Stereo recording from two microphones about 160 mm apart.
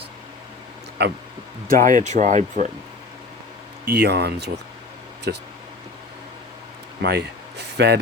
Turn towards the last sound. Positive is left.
turn(degrees=-90)